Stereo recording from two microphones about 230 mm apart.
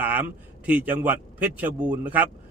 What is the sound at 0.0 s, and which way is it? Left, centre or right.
Speech, centre.